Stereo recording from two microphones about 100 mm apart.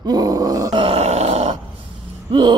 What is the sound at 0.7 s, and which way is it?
Grunt, 80° right.